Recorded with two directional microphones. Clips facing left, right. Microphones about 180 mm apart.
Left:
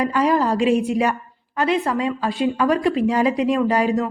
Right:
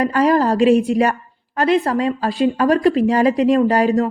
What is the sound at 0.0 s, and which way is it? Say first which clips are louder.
A woman's voice: right 3 dB; 40° right (ahead or behind).